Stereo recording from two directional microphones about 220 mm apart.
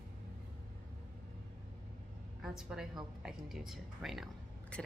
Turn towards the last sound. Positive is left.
turn(degrees=0)  # may be behind; listen again after turning